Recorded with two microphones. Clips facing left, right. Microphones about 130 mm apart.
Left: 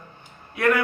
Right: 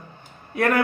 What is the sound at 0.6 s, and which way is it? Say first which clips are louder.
Speech: right 1 dB; 40° right (ahead or behind).